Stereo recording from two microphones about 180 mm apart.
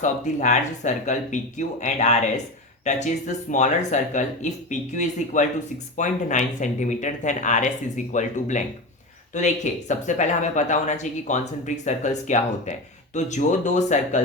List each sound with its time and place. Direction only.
0.0 s speech: 40° left (ahead or behind)